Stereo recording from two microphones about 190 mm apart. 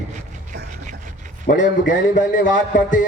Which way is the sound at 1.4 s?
45° left (ahead or behind).